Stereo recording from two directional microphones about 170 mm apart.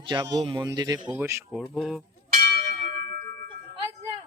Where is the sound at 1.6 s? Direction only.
Centre (ahead or behind).